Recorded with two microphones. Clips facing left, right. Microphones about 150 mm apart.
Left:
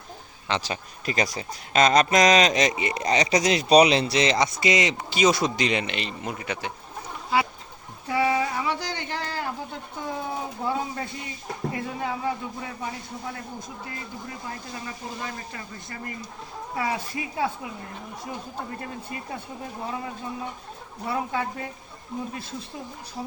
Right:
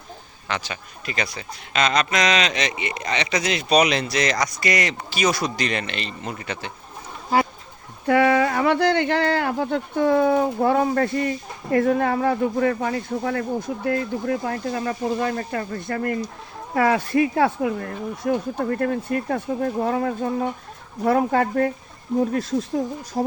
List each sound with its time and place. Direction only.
0.6 s speech: 35° left (ahead or behind); by 6.7 s 10° left (ahead or behind)
7.3 s speech: 45° right (ahead or behind)
8.0 s speech: 65° right (ahead or behind)